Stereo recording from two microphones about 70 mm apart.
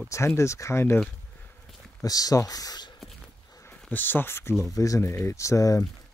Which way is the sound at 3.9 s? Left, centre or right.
Left.